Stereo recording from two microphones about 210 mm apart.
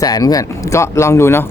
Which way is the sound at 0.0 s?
15° left (ahead or behind).